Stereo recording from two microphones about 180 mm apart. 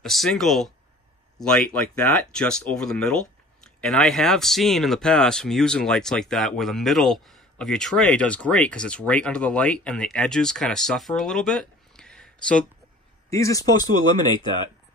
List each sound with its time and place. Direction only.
0.0 s speech: centre (ahead or behind)
13.3 s speech: 20° left (ahead or behind)